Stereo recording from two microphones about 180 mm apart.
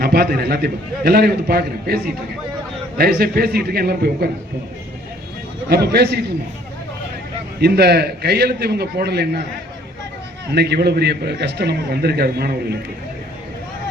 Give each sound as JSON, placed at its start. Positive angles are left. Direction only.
{"t": 0.0, "sound": "a man's voice", "side_deg": -55}
{"t": 3.0, "sound": "a man's voice", "side_deg": -60}
{"t": 5.6, "sound": "a man's voice", "side_deg": -65}
{"t": 7.6, "sound": "a man's voice", "side_deg": -65}
{"t": 10.5, "sound": "a man's voice", "side_deg": -65}